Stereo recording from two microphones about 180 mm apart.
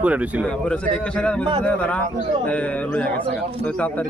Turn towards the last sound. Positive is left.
turn(degrees=5)  # may be behind; listen again after turning